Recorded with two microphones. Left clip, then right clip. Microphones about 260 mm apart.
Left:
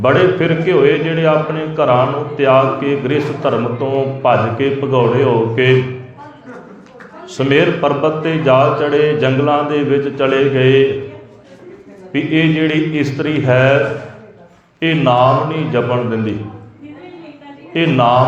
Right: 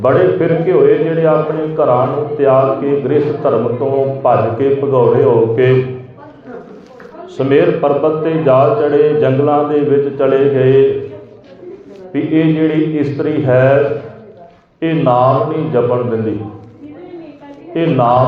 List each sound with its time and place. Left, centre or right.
0.0 s mantra: left
7.3 s mantra: left
12.1 s mantra: left
14.8 s mantra: left
17.7 s mantra: left